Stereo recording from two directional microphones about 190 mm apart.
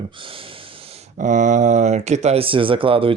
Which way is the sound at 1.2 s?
40° right (ahead or behind).